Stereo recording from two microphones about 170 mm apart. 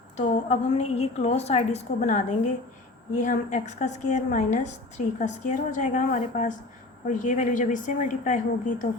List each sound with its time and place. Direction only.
0.2 s a woman's voice: 40° left (ahead or behind)